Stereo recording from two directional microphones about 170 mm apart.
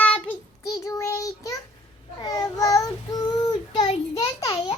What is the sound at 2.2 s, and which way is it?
Child singing, 20° left (ahead or behind).